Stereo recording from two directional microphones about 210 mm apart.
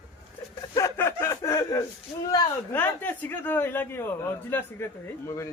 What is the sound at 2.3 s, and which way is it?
A man's voice, 10° left (ahead or behind).